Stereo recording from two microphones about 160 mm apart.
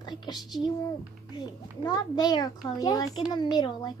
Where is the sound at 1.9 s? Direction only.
25° left (ahead or behind).